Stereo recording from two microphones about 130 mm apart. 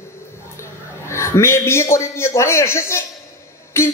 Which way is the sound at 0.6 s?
20° left (ahead or behind).